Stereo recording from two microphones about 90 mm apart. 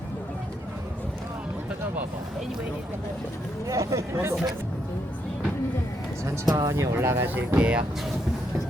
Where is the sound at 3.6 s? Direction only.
35° right (ahead or behind).